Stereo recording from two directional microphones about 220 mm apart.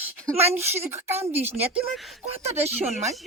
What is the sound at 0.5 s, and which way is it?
Speech, 10° right (ahead or behind).